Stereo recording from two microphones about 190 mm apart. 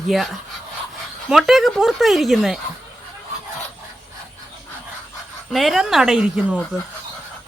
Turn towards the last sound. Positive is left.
turn(degrees=-5)  # may be behind; listen again after turning